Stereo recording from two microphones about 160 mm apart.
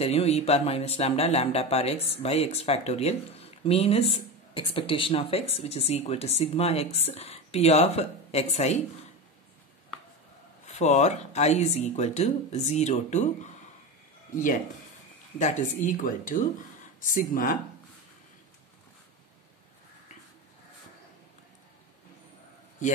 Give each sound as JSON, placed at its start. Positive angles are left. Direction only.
{"t": 0.0, "sound": "speech", "side_deg": 40}
{"t": 10.7, "sound": "speech", "side_deg": 45}
{"t": 14.3, "sound": "a man's voice", "side_deg": 55}